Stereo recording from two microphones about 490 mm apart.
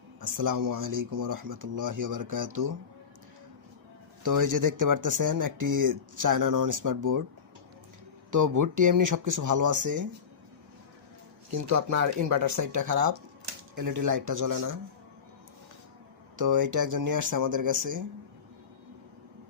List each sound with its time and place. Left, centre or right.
0.2 s speech: right
4.2 s speech: right
8.3 s speech: right
11.5 s speech: right
16.4 s speech: right